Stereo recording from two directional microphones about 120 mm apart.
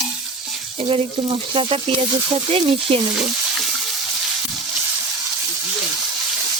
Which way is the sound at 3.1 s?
5° right (ahead or behind).